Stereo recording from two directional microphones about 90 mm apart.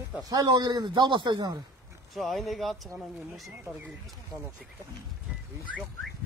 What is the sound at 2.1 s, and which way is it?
Speech, centre (ahead or behind).